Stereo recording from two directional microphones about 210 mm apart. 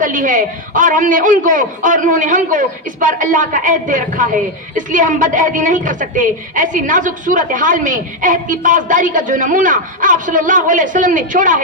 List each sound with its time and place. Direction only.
0.0 s a woman's voice: 40° right (ahead or behind)